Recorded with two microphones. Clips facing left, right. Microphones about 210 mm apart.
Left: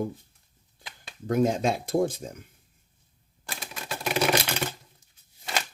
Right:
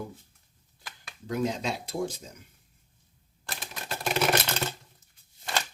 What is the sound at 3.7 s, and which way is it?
Typing, 10° left (ahead or behind).